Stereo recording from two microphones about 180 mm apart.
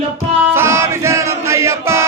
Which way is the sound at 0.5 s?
15° right (ahead or behind).